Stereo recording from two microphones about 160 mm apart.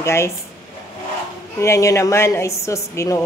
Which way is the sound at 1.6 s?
20° left (ahead or behind).